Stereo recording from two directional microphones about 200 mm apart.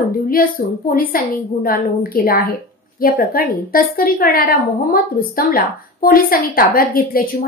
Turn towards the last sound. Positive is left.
turn(degrees=45)  # may be behind; listen again after turning